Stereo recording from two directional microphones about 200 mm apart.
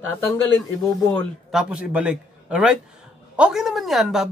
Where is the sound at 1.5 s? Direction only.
5° right (ahead or behind).